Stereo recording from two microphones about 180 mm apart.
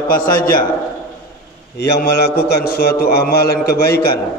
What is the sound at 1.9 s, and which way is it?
A man's voice, 60° left (ahead or behind).